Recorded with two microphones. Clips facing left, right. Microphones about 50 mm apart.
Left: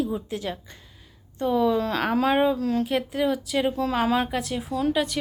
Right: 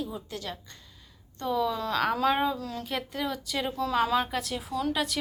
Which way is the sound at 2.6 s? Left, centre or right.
Left.